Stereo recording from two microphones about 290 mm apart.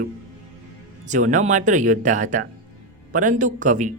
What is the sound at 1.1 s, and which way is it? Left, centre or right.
Speech, right.